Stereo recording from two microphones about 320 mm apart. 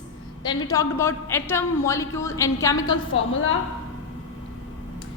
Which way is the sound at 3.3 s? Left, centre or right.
Left.